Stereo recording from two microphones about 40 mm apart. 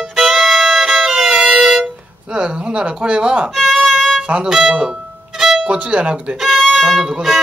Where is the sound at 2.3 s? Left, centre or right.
Right.